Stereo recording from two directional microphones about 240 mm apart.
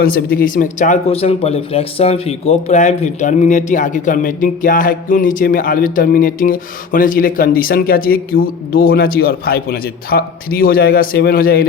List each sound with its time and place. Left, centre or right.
0.0 s speech: left